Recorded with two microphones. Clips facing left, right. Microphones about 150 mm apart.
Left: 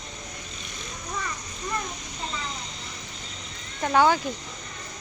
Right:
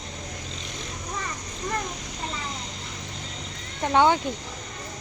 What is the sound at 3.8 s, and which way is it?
Speech, 25° right (ahead or behind).